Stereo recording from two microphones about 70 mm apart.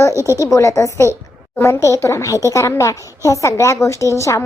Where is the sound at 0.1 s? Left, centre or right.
Right.